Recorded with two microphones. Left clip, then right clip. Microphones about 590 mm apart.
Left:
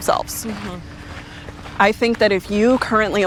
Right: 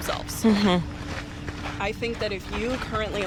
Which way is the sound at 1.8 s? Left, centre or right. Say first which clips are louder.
Left 14 dB; left.